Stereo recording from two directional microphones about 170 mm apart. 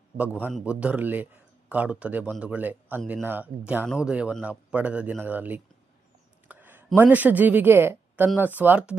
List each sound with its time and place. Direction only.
0.2 s speech: 10° right (ahead or behind)